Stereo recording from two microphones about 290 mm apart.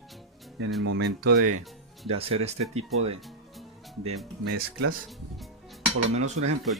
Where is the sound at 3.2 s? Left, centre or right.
Centre.